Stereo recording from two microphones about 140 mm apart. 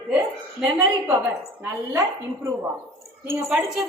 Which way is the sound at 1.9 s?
20° right (ahead or behind).